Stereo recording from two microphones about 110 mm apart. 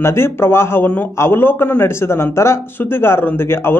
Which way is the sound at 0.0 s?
25° left (ahead or behind).